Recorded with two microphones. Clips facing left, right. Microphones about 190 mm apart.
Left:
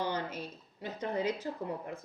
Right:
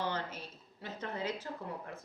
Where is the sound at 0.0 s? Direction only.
15° left (ahead or behind).